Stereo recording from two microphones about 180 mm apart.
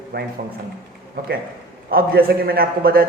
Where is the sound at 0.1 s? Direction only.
60° right (ahead or behind).